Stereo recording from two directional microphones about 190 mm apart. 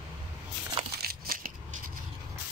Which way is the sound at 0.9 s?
55° right (ahead or behind).